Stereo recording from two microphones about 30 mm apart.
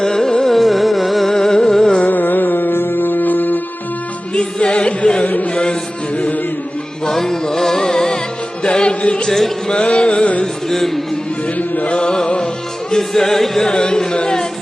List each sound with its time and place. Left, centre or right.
0.0 s music: centre
0.5 s music: centre
1.3 s a sound: centre
2.0 s music: left
4.4 s music: left
6.1 s music: left
7.1 s music: centre
8.6 s music: left
10.4 s music: centre
11.4 s music: left
11.9 s music: left
13.0 s music: centre
13.7 s music: left